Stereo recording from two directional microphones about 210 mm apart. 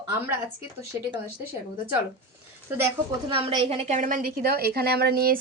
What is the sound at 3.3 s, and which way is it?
A woman's voice, 30° right (ahead or behind).